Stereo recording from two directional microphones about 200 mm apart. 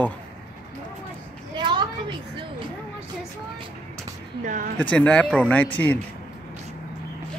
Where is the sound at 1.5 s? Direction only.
25° right (ahead or behind).